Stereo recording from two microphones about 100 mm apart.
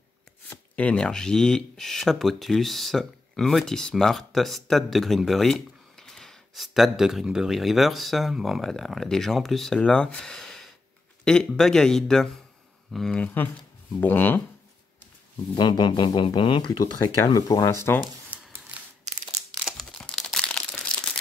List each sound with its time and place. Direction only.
0.7 s speech: 10° left (ahead or behind)
13.2 s speech: 15° left (ahead or behind)
15.5 s speech: 50° left (ahead or behind)
19.6 s crumpling: 5° left (ahead or behind)